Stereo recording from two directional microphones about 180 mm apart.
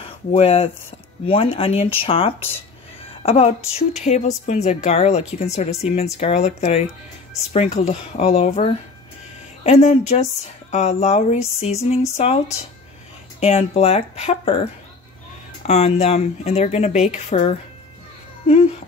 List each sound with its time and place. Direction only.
0.0 s a woman's voice: 35° left (ahead or behind)
13.4 s a woman's voice: 35° left (ahead or behind)
18.5 s a woman's voice: 35° left (ahead or behind)